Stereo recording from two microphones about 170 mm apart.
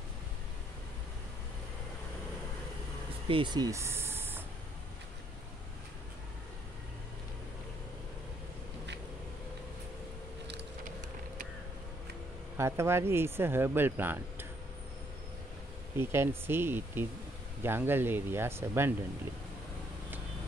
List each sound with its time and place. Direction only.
3.3 s speech: 30° right (ahead or behind); by 4.4 s 15° right (ahead or behind)
12.5 s speech: 15° right (ahead or behind)
16.0 s speech: 15° right (ahead or behind)